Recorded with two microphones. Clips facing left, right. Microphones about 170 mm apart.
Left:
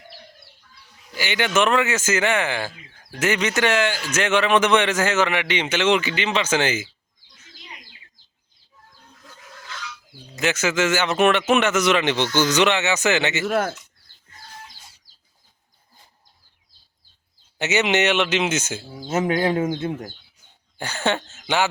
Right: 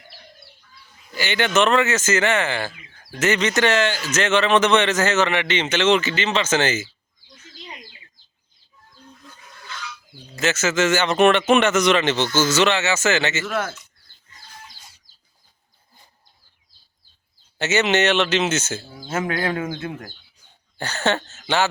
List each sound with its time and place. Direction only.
1.2 s a man's voice: 10° left (ahead or behind)
10.3 s a man's voice: 15° left (ahead or behind)
13.4 s speech: 40° left (ahead or behind)
17.6 s a man's voice: 15° left (ahead or behind)
20.7 s a man's voice: 10° left (ahead or behind)